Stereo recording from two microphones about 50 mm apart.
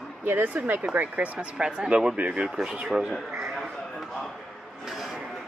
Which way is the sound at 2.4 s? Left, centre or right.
Centre.